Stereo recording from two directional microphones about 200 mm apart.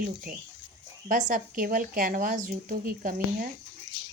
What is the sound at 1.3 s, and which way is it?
Speech, 45° right (ahead or behind).